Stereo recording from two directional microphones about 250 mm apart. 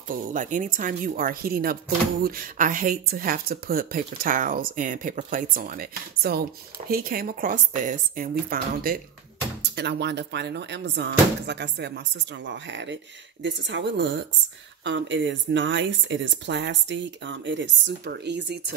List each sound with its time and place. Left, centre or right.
0.1 s speech: right